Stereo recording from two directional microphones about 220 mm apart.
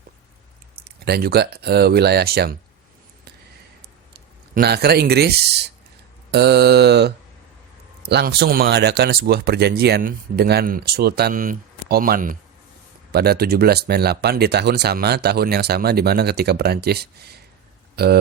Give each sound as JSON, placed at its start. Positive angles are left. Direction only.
{"t": 0.8, "sound": "speech", "side_deg": -45}
{"t": 4.5, "sound": "speech", "side_deg": -45}